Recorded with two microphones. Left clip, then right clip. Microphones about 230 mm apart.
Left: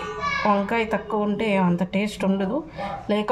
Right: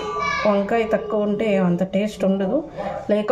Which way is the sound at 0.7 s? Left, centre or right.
Centre.